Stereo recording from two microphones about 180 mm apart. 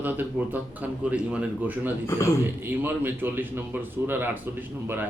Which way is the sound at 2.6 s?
10° right (ahead or behind).